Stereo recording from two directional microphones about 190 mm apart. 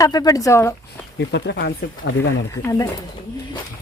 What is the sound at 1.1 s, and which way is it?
Speech, 60° left (ahead or behind).